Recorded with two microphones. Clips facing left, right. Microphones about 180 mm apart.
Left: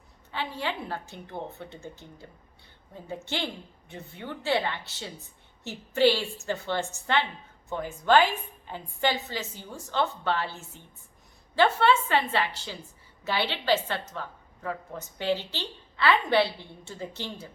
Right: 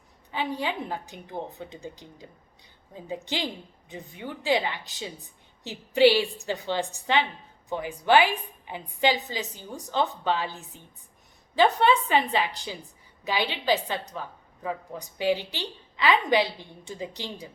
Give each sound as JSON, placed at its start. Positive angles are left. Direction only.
{"t": 0.3, "sound": "a woman's voice", "side_deg": -15}